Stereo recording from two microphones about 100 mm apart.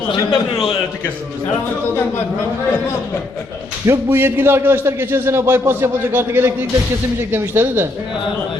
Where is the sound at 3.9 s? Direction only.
25° right (ahead or behind).